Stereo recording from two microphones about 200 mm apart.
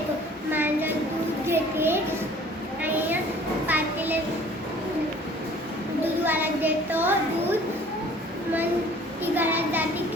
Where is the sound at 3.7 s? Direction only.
10° right (ahead or behind).